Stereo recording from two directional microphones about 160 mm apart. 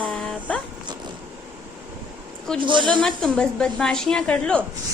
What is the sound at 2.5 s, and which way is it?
Speech, 30° right (ahead or behind).